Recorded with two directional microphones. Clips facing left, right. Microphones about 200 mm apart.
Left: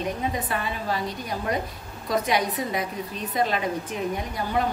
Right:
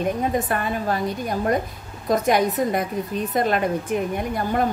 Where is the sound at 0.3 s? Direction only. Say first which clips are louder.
Right 6 dB; 50° right (ahead or behind).